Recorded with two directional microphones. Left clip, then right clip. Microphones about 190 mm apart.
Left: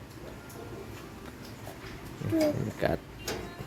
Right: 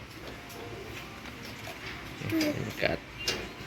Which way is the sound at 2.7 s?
20° left (ahead or behind).